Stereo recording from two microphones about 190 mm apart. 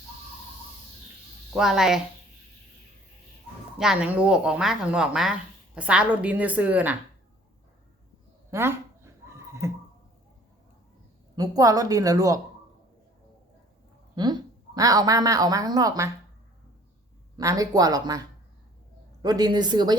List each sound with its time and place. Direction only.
1.5 s speech: 5° right (ahead or behind)
3.8 s a woman's voice: 5° right (ahead or behind)
8.4 s a sound: 15° right (ahead or behind)
11.3 s a woman's voice: 20° right (ahead or behind)
14.2 s a woman's voice: 20° right (ahead or behind)
17.3 s a woman's voice: 20° right (ahead or behind)